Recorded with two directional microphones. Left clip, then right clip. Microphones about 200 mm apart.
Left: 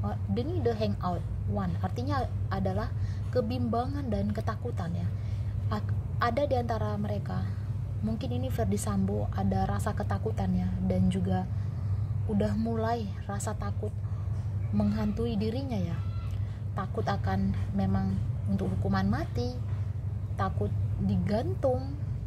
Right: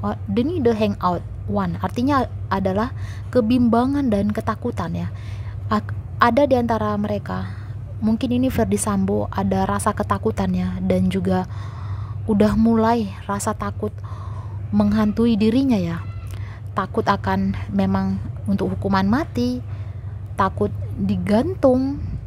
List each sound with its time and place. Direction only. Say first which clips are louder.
0.0 s a woman's voice: right 12 dB; 25° right (ahead or behind)
14.8 s a woman's voice: right 12 dB; 25° right (ahead or behind)
21.1 s a woman's voice: right 11 dB; 25° right (ahead or behind)